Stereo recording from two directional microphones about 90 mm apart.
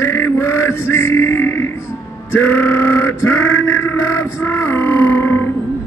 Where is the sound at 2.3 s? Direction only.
25° left (ahead or behind).